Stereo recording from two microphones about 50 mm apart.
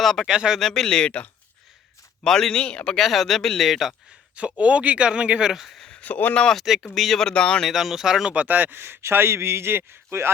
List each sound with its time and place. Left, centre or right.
0.0 s speech: centre
0.3 s speech: centre
0.6 s speech: centre
2.2 s speech: centre
2.6 s speech: left
2.9 s speech: centre
4.4 s speech: right
5.6 s a sound: centre
5.9 s speech: left
6.9 s speech: centre
7.3 s speech: centre
7.7 s speech: centre
8.3 s speech: right
9.0 s speech: right